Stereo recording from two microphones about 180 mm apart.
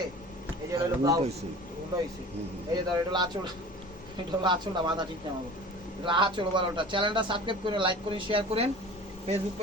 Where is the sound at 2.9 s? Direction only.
25° right (ahead or behind).